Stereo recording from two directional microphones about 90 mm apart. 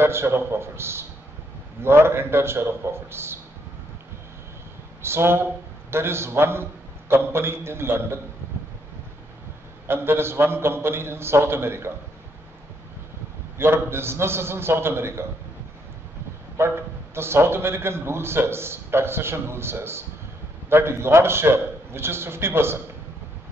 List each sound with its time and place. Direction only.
0.0 s a man's voice: 30° right (ahead or behind)
5.0 s a man's voice: 30° right (ahead or behind)
9.8 s a man's voice: 25° right (ahead or behind)
13.6 s a man's voice: 25° right (ahead or behind)
16.5 s a man's voice: 30° right (ahead or behind)